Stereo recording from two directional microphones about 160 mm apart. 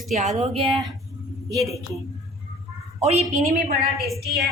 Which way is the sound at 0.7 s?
25° right (ahead or behind).